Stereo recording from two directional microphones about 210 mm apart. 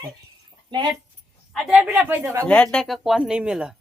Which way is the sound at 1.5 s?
Centre (ahead or behind).